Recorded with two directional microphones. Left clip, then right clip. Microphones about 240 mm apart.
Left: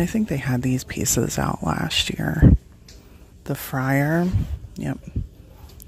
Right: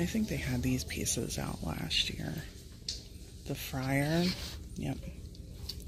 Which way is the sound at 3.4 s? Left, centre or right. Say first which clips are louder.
Left 12 dB; left.